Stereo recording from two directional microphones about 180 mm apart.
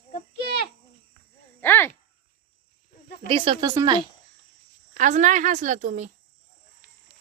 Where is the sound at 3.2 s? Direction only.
30° right (ahead or behind).